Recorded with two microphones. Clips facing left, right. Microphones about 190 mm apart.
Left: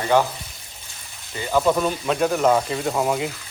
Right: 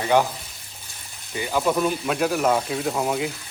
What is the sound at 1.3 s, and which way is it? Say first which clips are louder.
Speech: left 3 dB; 15° right (ahead or behind).